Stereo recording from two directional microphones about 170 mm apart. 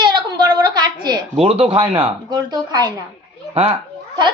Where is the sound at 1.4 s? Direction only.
35° right (ahead or behind).